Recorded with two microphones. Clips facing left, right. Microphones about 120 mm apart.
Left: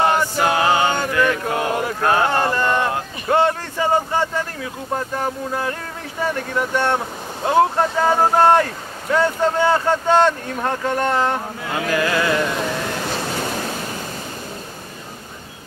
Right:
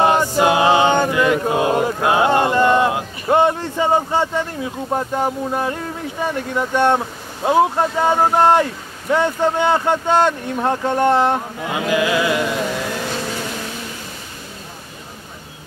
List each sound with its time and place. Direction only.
0.0 s chant: 20° right (ahead or behind)
2.0 s a sound: 15° right (ahead or behind)
6.5 s speech: 20° right (ahead or behind)